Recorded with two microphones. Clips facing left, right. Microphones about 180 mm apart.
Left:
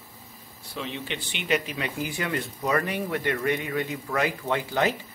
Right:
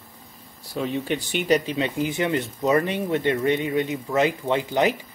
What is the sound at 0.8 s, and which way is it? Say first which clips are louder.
Speech: right 8 dB; 45° right (ahead or behind).